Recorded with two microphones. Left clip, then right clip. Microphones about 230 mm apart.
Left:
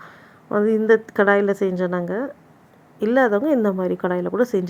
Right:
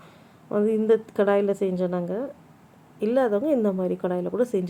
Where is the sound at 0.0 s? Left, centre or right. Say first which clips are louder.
Left 7 dB; centre.